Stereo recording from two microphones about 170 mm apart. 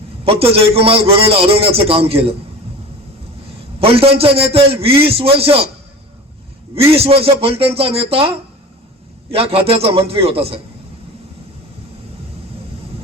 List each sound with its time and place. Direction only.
0.3 s a man's voice: 35° right (ahead or behind)
3.8 s a man's voice: 35° right (ahead or behind)
6.9 s a man's voice: 35° right (ahead or behind)
9.3 s a man's voice: 35° right (ahead or behind)